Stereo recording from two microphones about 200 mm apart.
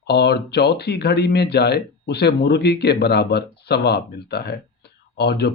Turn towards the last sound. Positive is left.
turn(degrees=55)  # may be behind; listen again after turning